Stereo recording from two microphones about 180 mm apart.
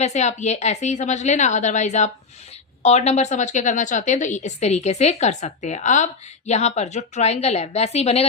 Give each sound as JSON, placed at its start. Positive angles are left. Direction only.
{"t": 0.0, "sound": "a woman's voice", "side_deg": 40}